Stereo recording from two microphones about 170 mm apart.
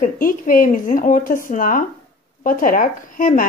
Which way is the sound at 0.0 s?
55° left (ahead or behind).